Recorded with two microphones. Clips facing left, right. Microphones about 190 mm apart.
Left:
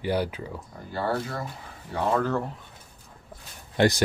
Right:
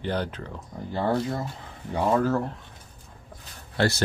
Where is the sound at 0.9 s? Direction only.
20° right (ahead or behind).